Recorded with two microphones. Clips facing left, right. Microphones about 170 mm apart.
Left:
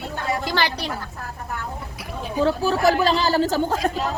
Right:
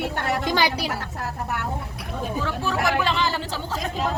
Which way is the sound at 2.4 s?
35° left (ahead or behind).